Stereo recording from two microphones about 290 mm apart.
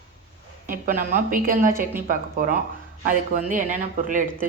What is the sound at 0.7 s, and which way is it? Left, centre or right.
Speech, right.